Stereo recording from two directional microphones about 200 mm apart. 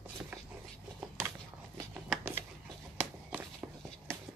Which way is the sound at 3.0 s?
10° right (ahead or behind).